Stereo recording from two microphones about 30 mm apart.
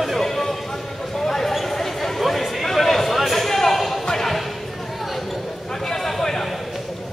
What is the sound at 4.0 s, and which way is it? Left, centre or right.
Music, centre.